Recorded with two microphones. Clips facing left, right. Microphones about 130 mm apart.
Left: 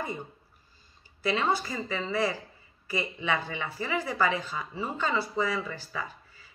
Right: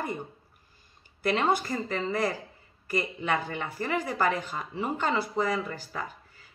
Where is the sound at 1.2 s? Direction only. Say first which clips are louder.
Right 2 dB; 50° right (ahead or behind).